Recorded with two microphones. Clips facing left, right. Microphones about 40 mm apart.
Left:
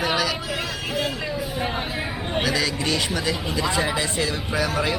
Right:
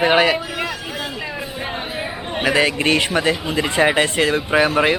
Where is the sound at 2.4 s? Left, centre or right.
Right.